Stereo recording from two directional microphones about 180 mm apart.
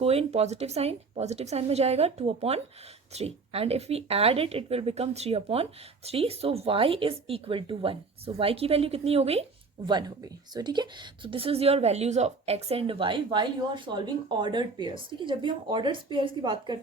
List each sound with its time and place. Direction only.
0.0 s speech: 35° right (ahead or behind)